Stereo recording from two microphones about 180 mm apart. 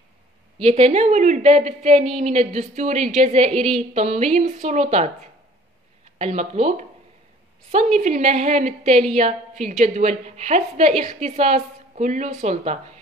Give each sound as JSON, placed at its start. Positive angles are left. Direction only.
{"t": 0.7, "sound": "a woman's voice", "side_deg": -40}
{"t": 6.1, "sound": "a woman's voice", "side_deg": -40}